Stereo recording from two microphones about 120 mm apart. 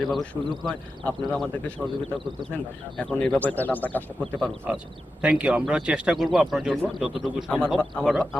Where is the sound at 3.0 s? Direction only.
5° left (ahead or behind).